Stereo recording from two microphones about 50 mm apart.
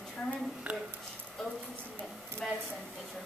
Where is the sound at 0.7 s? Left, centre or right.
Right.